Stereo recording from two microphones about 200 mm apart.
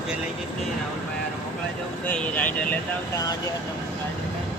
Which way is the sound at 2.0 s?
10° left (ahead or behind).